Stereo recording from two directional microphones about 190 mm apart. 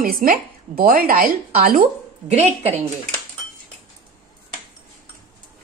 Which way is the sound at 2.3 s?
35° right (ahead or behind).